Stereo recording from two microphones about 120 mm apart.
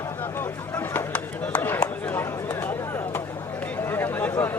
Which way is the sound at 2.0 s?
20° left (ahead or behind).